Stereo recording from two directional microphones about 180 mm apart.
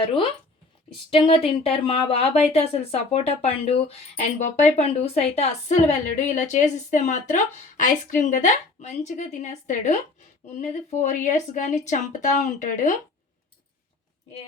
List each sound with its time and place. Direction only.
0.0 s speech: 30° left (ahead or behind)
11.0 s speech: 40° left (ahead or behind)